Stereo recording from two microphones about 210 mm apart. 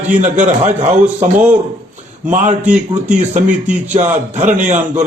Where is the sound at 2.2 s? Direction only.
35° right (ahead or behind).